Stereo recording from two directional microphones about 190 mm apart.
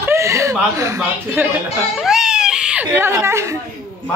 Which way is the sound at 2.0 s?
5° right (ahead or behind).